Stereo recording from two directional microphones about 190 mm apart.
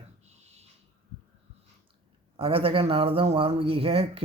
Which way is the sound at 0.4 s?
35° right (ahead or behind).